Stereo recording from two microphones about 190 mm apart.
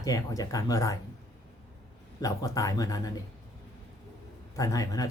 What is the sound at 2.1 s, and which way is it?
Speech, 20° left (ahead or behind).